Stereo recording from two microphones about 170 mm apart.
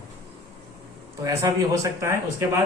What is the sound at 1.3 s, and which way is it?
A man's voice, 20° right (ahead or behind).